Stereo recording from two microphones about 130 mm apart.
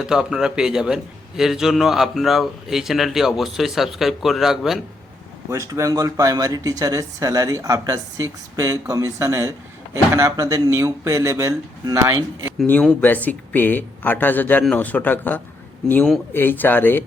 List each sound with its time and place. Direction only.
0.0 s a man's voice: 5° right (ahead or behind)
5.5 s speech: 25° right (ahead or behind)
13.0 s speech: 10° left (ahead or behind)